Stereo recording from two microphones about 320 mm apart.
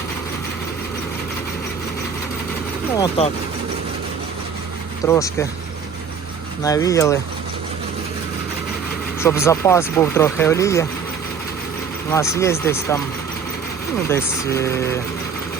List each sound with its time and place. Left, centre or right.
3.2 s speech: centre
5.0 s speech: centre
6.6 s speech: centre
9.2 s speech: centre
12.1 s speech: centre
14.1 s speech: centre